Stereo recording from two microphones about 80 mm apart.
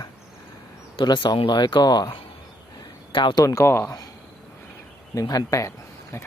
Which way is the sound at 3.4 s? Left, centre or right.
Left.